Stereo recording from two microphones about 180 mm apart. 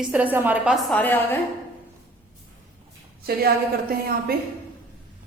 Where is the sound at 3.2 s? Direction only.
55° right (ahead or behind).